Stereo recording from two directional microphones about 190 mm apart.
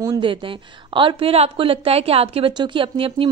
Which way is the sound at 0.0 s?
25° right (ahead or behind).